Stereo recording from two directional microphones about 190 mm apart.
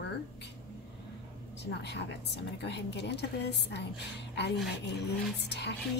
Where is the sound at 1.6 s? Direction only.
65° left (ahead or behind).